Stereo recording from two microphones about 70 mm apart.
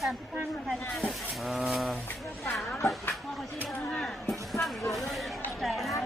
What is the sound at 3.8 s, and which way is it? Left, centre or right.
Speech, centre.